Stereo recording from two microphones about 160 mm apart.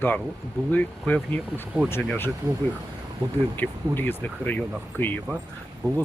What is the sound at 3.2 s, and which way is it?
Speech, 30° right (ahead or behind).